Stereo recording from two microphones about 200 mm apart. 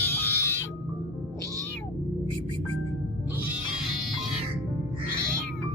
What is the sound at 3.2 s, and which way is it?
Music, 10° right (ahead or behind).